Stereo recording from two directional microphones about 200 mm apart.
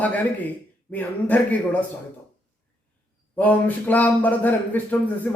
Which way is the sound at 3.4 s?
10° left (ahead or behind).